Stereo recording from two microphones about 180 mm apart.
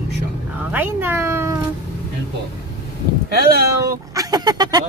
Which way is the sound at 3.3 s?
60° right (ahead or behind).